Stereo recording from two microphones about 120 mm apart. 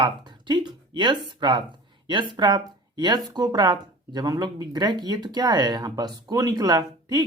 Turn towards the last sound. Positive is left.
turn(degrees=-35)  # may be behind; listen again after turning